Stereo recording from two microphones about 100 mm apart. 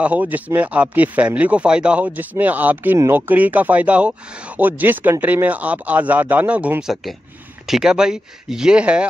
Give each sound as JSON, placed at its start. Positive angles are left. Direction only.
{"t": 0.0, "sound": "speech", "side_deg": -15}